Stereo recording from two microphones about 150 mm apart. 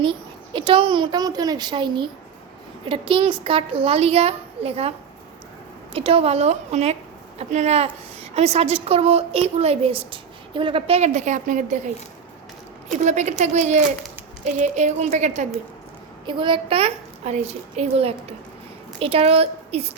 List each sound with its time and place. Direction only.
0.0 s a child's voice: 35° right (ahead or behind); by 11.8 s 55° right (ahead or behind)
13.1 s a woman's voice: 50° right (ahead or behind)
16.2 s a child's voice: 35° right (ahead or behind)